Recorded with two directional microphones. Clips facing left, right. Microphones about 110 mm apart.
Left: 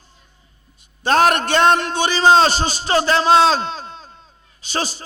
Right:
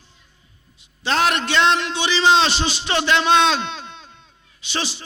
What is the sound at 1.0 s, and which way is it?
A man's voice, 45° left (ahead or behind).